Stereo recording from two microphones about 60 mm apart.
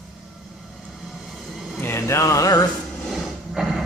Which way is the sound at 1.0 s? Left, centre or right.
Centre.